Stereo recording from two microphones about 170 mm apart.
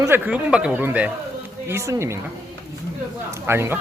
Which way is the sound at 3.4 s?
15° right (ahead or behind).